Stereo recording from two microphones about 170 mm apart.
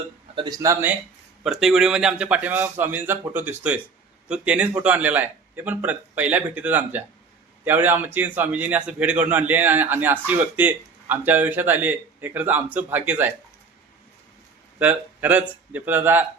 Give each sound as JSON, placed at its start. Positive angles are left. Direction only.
{"t": 0.3, "sound": "a man's voice", "side_deg": -20}
{"t": 1.5, "sound": "a man's voice", "side_deg": 0}
{"t": 14.8, "sound": "a man's voice", "side_deg": -10}